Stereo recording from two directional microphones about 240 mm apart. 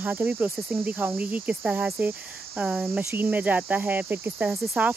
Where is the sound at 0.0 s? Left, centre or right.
Centre.